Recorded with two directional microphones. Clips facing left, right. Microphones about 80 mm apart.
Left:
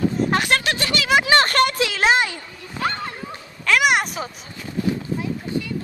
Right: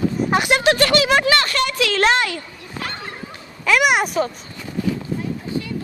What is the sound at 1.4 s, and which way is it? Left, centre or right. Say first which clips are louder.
Speech: left 3 dB; left.